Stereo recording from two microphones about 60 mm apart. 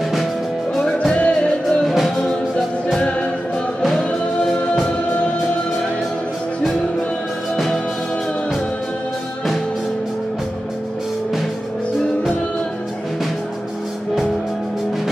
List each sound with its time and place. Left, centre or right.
1.1 s music: centre